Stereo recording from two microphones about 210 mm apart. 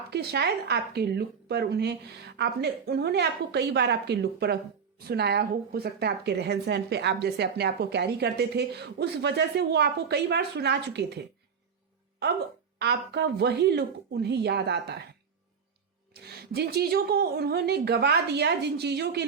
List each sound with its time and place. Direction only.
0.1 s a woman's voice: 50° right (ahead or behind)
12.8 s a woman's voice: 55° right (ahead or behind)
16.1 s a woman's voice: 50° right (ahead or behind)